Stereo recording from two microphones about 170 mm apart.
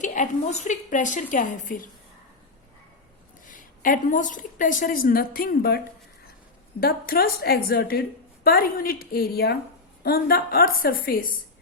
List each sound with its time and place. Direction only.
0.0 s a woman's voice: 45° left (ahead or behind)
3.4 s a woman's voice: 50° left (ahead or behind)